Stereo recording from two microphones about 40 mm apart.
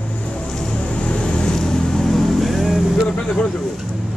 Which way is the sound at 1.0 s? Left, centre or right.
Left.